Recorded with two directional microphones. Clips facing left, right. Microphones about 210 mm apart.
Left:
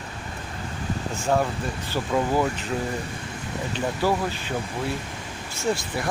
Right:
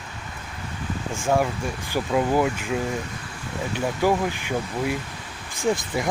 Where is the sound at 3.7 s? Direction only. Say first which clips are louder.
Right 2 dB; 15° right (ahead or behind).